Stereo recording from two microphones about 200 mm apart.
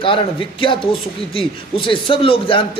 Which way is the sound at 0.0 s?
25° left (ahead or behind).